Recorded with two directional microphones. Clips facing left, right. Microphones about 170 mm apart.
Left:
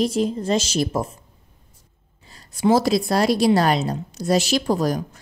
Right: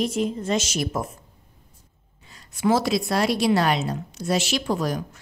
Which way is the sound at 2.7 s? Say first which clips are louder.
Left 5 dB; 35° left (ahead or behind).